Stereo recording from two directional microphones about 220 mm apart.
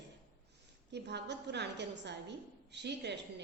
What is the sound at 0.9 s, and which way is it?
A woman's voice, 50° right (ahead or behind).